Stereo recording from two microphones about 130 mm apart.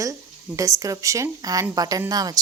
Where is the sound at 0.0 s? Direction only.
25° right (ahead or behind).